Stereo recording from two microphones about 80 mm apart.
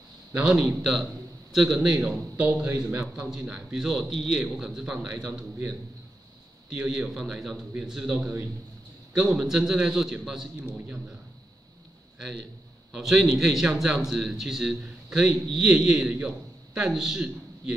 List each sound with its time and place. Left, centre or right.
0.6 s a man's voice: centre
2.0 s a man's voice: centre
12.9 s a man's voice: centre